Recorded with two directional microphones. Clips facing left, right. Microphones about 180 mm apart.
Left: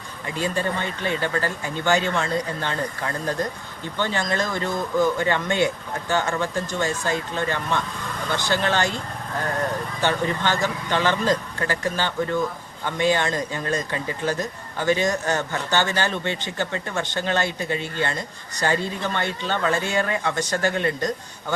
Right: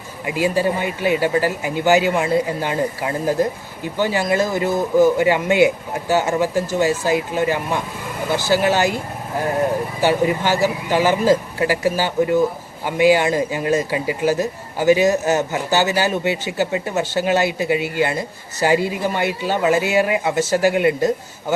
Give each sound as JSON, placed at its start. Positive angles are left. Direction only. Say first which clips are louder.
{"t": 0.3, "sound": "speech", "louder": "right 7 dB", "side_deg": -10}
{"t": 3.0, "sound": "speech", "louder": "right 6 dB", "side_deg": -20}
{"t": 3.2, "sound": "speech", "louder": "right 10 dB", "side_deg": -10}